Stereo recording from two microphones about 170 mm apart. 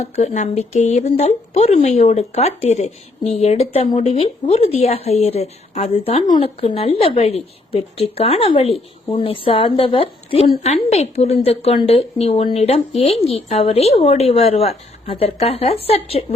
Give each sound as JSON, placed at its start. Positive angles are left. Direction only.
{"t": 0.0, "sound": "speech", "side_deg": 40}